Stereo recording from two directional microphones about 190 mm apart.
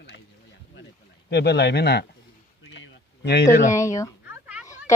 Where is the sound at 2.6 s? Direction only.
75° left (ahead or behind).